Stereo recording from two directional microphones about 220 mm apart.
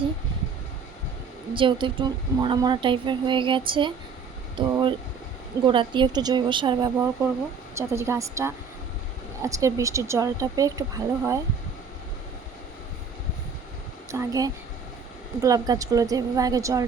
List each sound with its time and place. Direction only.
1.5 s a woman's voice: 20° right (ahead or behind)
4.5 s a sound: 20° right (ahead or behind)
5.6 s a woman's voice: 20° right (ahead or behind)
14.1 s speech: 15° right (ahead or behind)